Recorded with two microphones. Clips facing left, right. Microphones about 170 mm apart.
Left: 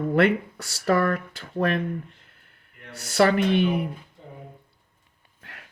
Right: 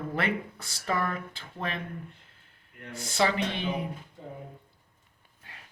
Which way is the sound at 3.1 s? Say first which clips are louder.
Left 8 dB; 65° left (ahead or behind).